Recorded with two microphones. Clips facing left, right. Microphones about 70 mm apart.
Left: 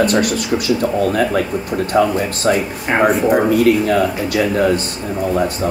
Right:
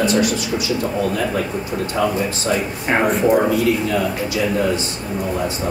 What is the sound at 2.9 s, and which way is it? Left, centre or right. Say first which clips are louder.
Speech: left 2 dB; centre.